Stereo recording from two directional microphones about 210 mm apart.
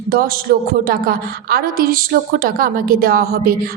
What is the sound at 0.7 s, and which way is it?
A woman's voice, 45° right (ahead or behind).